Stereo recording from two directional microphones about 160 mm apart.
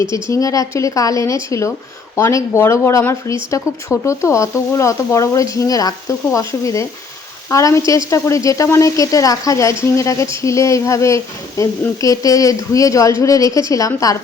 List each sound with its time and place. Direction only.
0.3 s speech: 20° left (ahead or behind)